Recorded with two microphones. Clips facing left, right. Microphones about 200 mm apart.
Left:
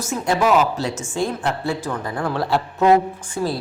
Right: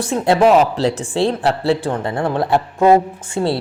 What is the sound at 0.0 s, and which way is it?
Speech, 30° right (ahead or behind).